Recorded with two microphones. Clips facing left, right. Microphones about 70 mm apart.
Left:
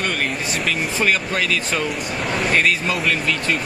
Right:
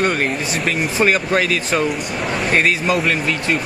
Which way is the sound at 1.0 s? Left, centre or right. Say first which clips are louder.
Right 5 dB; right.